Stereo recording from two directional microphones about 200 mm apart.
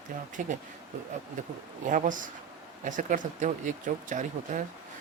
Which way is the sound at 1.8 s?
40° right (ahead or behind).